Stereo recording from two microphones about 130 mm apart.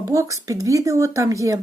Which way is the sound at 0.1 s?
25° right (ahead or behind).